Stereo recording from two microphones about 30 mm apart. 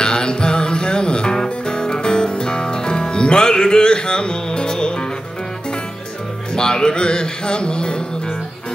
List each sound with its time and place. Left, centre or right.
0.0 s music: left
6.5 s music: left